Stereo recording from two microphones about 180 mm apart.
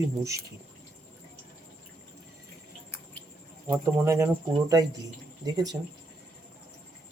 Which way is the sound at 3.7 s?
15° right (ahead or behind).